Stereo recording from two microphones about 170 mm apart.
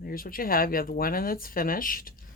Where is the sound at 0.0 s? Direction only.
55° left (ahead or behind).